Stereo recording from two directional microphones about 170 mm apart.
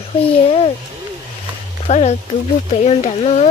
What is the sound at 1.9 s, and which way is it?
Speech, 40° left (ahead or behind).